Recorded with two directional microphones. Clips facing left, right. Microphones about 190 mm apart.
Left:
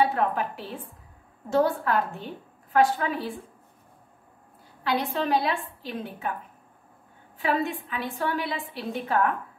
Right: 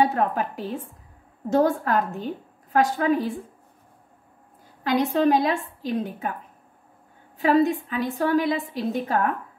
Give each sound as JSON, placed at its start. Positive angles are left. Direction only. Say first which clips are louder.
{"t": 0.0, "sound": "a woman's voice", "louder": "right 2 dB", "side_deg": -40}
{"t": 4.8, "sound": "a woman's voice", "louder": "right 6 dB", "side_deg": -45}
{"t": 7.3, "sound": "a woman's voice", "louder": "right 7 dB", "side_deg": -40}